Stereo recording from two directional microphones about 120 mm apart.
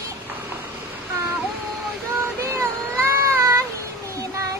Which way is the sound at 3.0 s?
20° right (ahead or behind).